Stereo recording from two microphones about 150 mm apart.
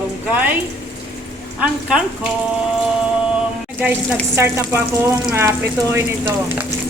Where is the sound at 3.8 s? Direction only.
10° right (ahead or behind).